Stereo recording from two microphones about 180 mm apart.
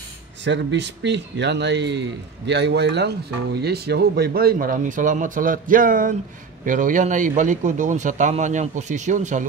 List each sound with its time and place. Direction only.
0.4 s speech: 85° right; by 9.5 s 45° right (ahead or behind)